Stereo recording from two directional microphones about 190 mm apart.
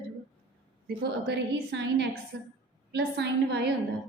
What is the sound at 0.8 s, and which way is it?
A woman's voice, 60° right (ahead or behind).